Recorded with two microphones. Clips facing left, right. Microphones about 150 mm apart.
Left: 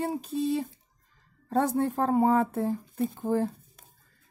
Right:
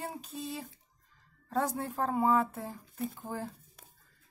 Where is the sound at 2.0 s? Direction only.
50° left (ahead or behind).